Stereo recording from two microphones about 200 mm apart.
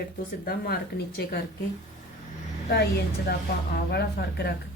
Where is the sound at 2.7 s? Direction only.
50° left (ahead or behind).